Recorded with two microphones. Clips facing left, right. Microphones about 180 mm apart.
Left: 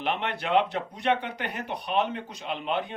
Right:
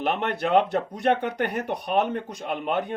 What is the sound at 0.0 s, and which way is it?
Speech, 45° right (ahead or behind).